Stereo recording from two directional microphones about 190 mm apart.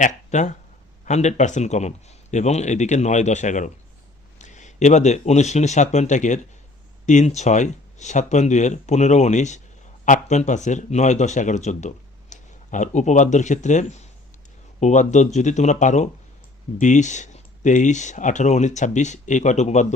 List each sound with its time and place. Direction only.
0.0 s speech: 40° left (ahead or behind)